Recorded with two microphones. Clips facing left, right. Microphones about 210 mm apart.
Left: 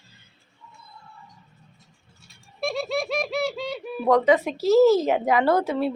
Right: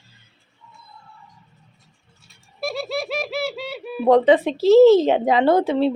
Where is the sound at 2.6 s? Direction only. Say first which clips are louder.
Even; 5° right (ahead or behind).